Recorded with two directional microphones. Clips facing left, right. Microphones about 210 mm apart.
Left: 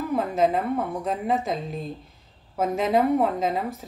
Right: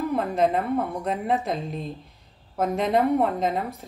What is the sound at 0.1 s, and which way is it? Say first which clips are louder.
Speech: left 3 dB; centre (ahead or behind).